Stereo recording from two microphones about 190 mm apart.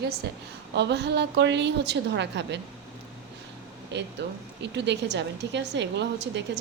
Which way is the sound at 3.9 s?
65° right (ahead or behind).